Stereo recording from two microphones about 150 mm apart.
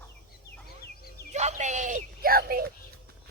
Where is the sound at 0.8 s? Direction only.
90° left.